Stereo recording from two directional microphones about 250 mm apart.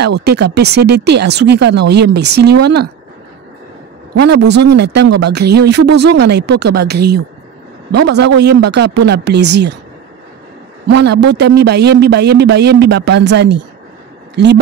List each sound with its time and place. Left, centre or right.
0.0 s speech: right
4.2 s speech: right
11.1 s speech: right